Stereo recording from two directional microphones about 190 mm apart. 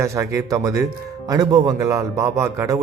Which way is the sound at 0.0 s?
15° right (ahead or behind).